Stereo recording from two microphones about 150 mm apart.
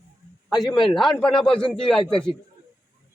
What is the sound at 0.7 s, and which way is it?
Speech, 35° left (ahead or behind).